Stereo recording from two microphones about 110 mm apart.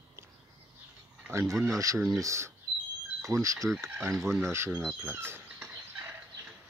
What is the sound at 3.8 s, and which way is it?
Speech, 20° right (ahead or behind).